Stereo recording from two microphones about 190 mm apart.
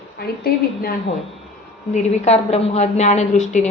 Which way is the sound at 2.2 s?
35° left (ahead or behind).